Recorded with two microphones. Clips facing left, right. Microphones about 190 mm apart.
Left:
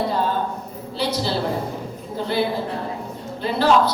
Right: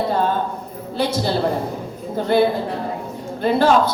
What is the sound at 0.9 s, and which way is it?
Speech, 50° right (ahead or behind).